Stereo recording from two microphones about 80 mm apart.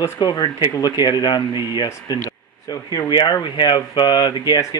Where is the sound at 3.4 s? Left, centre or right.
Left.